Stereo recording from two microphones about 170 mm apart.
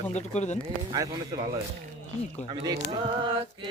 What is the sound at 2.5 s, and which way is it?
Speech, 25° right (ahead or behind).